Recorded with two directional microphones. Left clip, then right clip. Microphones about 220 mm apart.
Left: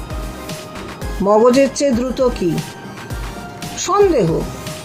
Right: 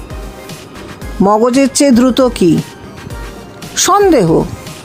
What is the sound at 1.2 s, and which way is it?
Speech, 55° right (ahead or behind).